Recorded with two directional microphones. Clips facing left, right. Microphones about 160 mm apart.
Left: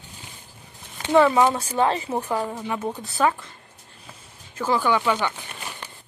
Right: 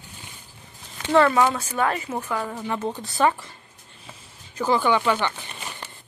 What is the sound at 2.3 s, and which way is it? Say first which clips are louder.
Speech: left 1 dB; 20° left (ahead or behind).